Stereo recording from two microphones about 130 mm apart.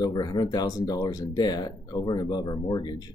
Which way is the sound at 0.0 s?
30° left (ahead or behind).